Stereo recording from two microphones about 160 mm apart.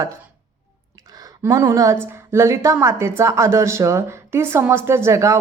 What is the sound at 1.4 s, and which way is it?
A woman's voice, 20° right (ahead or behind).